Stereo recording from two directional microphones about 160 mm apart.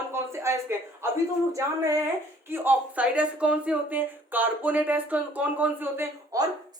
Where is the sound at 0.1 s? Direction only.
15° right (ahead or behind).